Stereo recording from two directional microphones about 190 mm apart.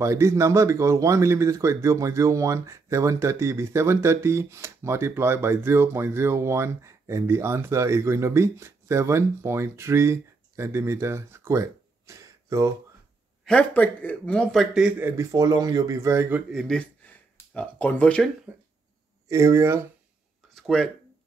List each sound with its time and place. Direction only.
0.0 s speech: 15° right (ahead or behind)
13.5 s speech: 5° left (ahead or behind); by 16.6 s 10° right (ahead or behind)
16.6 s speech: 5° left (ahead or behind)
19.2 s speech: 15° right (ahead or behind)
20.5 s speech: centre (ahead or behind)